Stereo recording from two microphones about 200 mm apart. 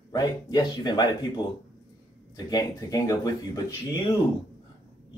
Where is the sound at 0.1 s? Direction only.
20° left (ahead or behind).